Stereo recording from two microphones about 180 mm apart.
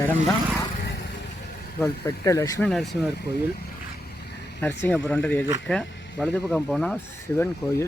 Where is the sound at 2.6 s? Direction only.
Centre (ahead or behind).